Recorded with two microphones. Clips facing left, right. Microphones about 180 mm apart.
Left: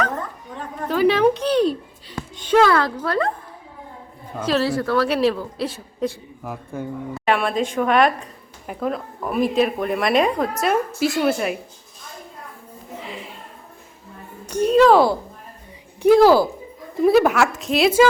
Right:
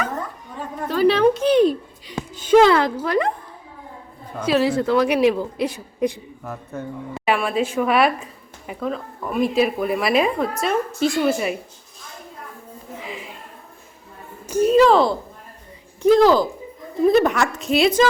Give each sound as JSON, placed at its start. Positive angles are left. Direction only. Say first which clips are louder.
{"t": 0.9, "sound": "a sound", "louder": "even", "side_deg": 10}
{"t": 1.4, "sound": "a sound", "louder": "right 3 dB", "side_deg": -10}
{"t": 2.6, "sound": "speech", "louder": "right 2 dB", "side_deg": -20}
{"t": 4.4, "sound": "a woman's voice", "louder": "right 2 dB", "side_deg": -10}
{"t": 6.4, "sound": "speech", "louder": "left 1 dB", "side_deg": 10}
{"t": 7.3, "sound": "speech", "louder": "even", "side_deg": -5}
{"t": 13.1, "sound": "music", "louder": "right 2 dB", "side_deg": 0}
{"t": 14.4, "sound": "speech", "louder": "even", "side_deg": -5}